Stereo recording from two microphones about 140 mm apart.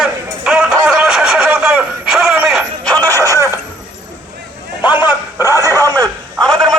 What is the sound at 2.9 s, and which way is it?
Music, 15° left (ahead or behind).